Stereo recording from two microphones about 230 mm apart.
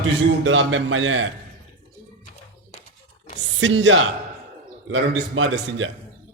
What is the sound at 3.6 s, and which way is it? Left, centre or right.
A man's voice, right.